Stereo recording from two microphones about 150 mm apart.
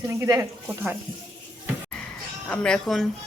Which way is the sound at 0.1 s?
20° right (ahead or behind).